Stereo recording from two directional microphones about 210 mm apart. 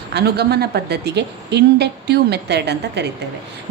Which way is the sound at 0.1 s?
50° right (ahead or behind).